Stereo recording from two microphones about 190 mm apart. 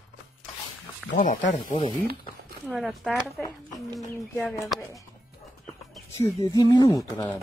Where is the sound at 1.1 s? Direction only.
45° left (ahead or behind).